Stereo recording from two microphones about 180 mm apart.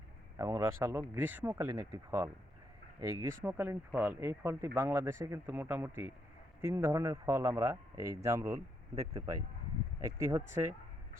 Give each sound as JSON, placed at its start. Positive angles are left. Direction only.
{"t": 0.3, "sound": "speech", "side_deg": -15}